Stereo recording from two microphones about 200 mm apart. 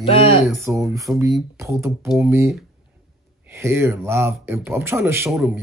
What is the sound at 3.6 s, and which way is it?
A man's voice, 15° right (ahead or behind).